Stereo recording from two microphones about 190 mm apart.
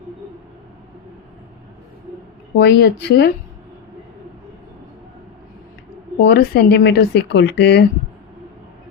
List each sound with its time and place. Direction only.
2.6 s speech: 60° left (ahead or behind)
6.2 s speech: 60° left (ahead or behind)